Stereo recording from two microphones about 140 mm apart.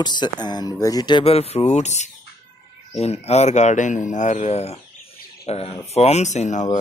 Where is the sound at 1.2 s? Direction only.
50° left (ahead or behind).